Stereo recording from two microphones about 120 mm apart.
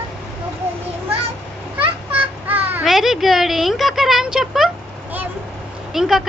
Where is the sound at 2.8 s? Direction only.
5° right (ahead or behind).